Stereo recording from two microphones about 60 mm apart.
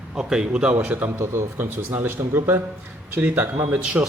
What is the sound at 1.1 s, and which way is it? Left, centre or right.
Speech, right.